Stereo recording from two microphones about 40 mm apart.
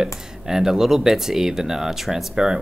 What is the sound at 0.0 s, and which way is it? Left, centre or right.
Speech, centre.